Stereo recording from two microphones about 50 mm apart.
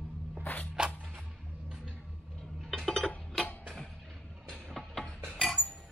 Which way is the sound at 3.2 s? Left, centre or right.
Centre.